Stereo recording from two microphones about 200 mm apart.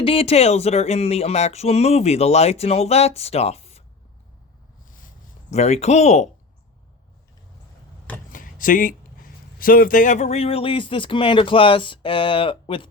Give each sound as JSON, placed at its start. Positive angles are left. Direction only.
{"t": 0.0, "sound": "speech", "side_deg": 25}
{"t": 5.5, "sound": "speech", "side_deg": 35}
{"t": 8.3, "sound": "speech", "side_deg": 45}